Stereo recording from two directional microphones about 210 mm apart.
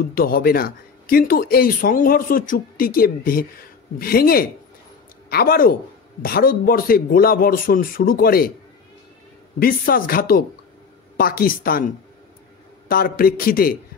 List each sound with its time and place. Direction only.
0.0 s speech: 45° left (ahead or behind)
9.6 s speech: 45° left (ahead or behind)